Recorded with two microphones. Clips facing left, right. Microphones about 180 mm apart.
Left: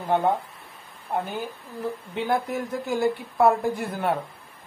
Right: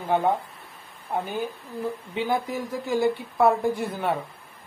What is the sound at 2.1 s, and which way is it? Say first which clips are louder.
Speech: left 1 dB; centre (ahead or behind).